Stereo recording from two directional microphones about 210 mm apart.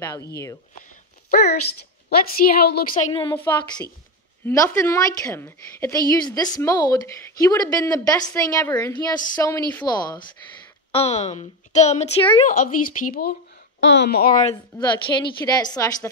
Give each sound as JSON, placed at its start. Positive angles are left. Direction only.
{"t": 0.0, "sound": "a woman's voice", "side_deg": 15}
{"t": 2.0, "sound": "a woman's voice", "side_deg": 45}
{"t": 2.9, "sound": "a woman's voice", "side_deg": 25}
{"t": 4.5, "sound": "a woman's voice", "side_deg": 15}
{"t": 14.4, "sound": "a woman's voice", "side_deg": 25}